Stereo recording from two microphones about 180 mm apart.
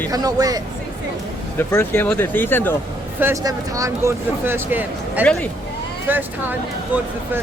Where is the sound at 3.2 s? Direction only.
15° right (ahead or behind).